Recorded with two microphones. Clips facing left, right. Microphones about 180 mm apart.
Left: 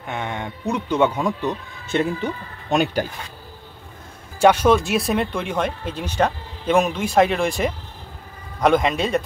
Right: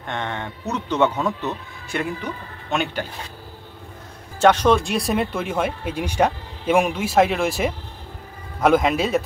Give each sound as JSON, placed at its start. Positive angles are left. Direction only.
{"t": 0.0, "sound": "speech", "side_deg": 10}
{"t": 1.9, "sound": "speech", "side_deg": 25}
{"t": 2.7, "sound": "speech", "side_deg": 40}
{"t": 4.4, "sound": "speech", "side_deg": 10}